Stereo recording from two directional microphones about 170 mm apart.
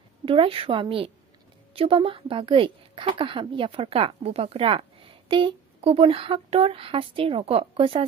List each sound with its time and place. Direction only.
0.2 s a woman's voice: 30° right (ahead or behind)